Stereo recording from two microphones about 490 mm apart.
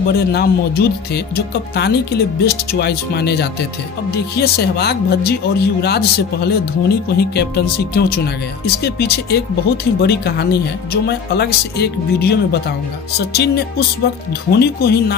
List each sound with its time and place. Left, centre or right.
0.1 s speech: centre